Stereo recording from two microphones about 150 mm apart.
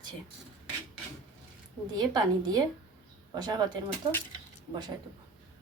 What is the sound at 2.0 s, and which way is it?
A woman's voice, 25° right (ahead or behind).